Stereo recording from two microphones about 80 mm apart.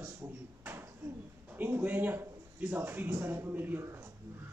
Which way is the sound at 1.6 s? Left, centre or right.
Right.